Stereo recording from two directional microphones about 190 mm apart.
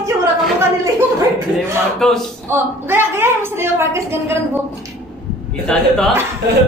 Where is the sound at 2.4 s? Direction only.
10° right (ahead or behind).